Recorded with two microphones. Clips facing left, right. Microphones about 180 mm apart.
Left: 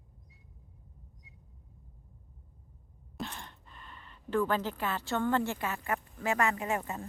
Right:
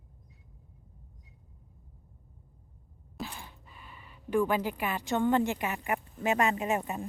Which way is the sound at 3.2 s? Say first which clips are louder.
Even; 5° right (ahead or behind).